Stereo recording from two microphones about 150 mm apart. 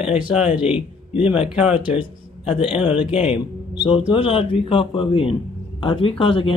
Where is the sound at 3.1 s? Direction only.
40° left (ahead or behind).